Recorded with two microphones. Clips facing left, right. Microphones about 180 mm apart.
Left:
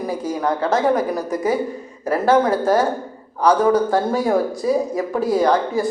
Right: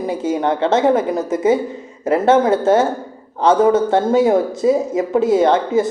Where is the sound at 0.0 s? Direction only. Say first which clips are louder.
Right 3 dB; 25° right (ahead or behind).